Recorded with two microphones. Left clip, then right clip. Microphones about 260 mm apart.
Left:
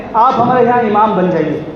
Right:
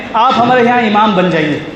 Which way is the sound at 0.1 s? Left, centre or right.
Right.